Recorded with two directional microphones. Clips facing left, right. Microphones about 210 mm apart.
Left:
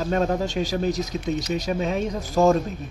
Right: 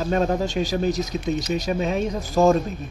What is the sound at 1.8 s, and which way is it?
Speech, 10° right (ahead or behind).